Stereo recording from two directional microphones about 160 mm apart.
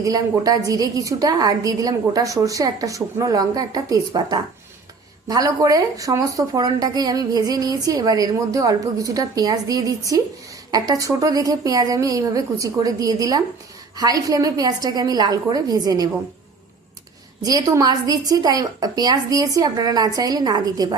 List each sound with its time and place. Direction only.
0.0 s a woman's voice: 20° right (ahead or behind)
17.4 s a woman's voice: 25° right (ahead or behind)